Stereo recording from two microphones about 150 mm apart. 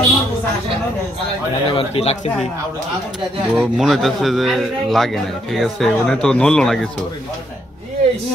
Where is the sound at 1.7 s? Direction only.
40° left (ahead or behind).